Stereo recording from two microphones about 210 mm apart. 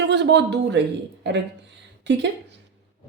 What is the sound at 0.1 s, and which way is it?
Speech, 55° right (ahead or behind).